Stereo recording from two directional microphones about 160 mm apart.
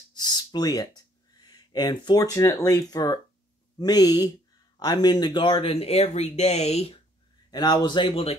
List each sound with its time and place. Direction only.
0.1 s a sound: 25° left (ahead or behind)
1.4 s speech: 25° left (ahead or behind); by 7.0 s 40° left (ahead or behind)
7.5 s speech: 25° left (ahead or behind)